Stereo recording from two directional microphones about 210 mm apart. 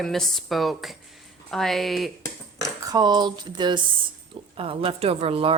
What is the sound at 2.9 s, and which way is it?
A woman's voice, 20° right (ahead or behind).